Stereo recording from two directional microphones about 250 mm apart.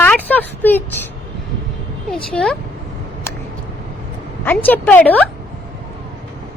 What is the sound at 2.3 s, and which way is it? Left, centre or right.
Speech, centre.